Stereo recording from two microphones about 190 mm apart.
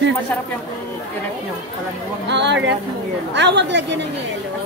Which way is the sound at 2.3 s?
65° right (ahead or behind).